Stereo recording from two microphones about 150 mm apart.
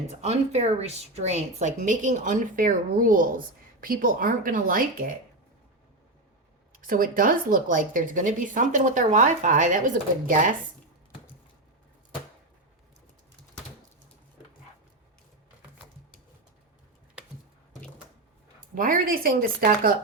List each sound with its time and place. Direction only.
0.1 s a woman's voice: 45° right (ahead or behind); by 5.1 s 70° right (ahead or behind)
6.8 s a woman's voice: 65° right (ahead or behind)
17.2 s a sound: 10° right (ahead or behind)
18.7 s speech: 65° right (ahead or behind)